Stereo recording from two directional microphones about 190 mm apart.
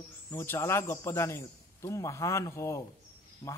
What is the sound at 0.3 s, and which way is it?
A man's voice, 15° left (ahead or behind).